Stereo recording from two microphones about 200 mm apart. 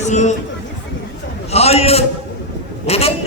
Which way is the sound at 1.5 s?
30° left (ahead or behind).